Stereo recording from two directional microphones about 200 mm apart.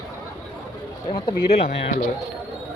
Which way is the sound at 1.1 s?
30° left (ahead or behind).